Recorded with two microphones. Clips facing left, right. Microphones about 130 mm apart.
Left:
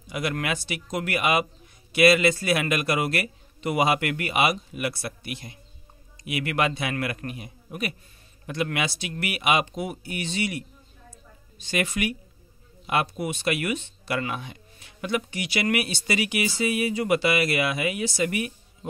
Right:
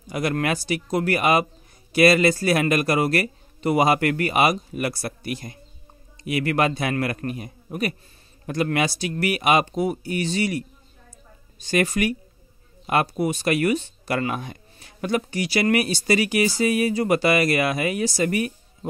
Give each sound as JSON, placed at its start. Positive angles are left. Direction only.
{"t": 0.0, "sound": "speech", "side_deg": -40}
{"t": 11.1, "sound": "a sound", "side_deg": -40}
{"t": 12.8, "sound": "speech", "side_deg": -40}